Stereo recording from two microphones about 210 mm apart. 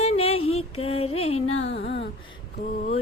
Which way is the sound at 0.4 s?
90° left.